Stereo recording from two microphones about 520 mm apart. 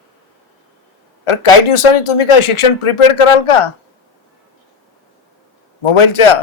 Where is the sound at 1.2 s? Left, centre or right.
Left.